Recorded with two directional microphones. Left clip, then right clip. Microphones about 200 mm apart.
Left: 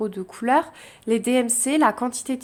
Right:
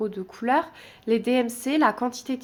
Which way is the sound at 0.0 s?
15° left (ahead or behind).